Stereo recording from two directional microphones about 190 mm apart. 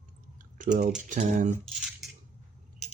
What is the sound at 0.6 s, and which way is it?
Speech, 45° right (ahead or behind).